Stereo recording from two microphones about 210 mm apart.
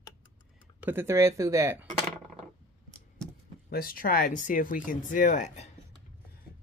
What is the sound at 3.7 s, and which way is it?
Speech, 45° left (ahead or behind).